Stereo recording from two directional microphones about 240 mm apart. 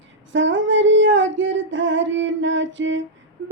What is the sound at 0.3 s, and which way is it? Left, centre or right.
Female singing, right.